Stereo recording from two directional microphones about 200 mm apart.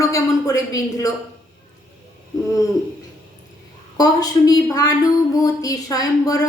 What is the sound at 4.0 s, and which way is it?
A woman's voice, 20° left (ahead or behind).